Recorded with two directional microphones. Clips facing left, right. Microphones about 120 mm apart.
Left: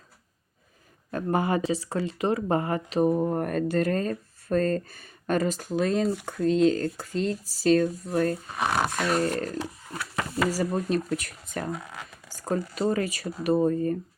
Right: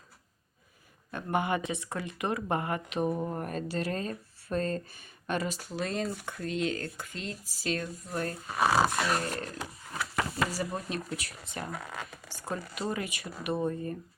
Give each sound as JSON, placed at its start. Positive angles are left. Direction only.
{"t": 1.1, "sound": "speech", "side_deg": 35}
{"t": 3.2, "sound": "speech", "side_deg": 50}
{"t": 8.5, "sound": "speech", "side_deg": -5}
{"t": 10.5, "sound": "speech", "side_deg": 40}